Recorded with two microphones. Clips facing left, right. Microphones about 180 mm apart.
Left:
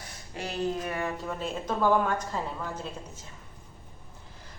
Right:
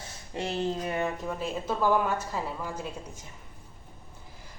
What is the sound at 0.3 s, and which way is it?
Speech, 25° right (ahead or behind).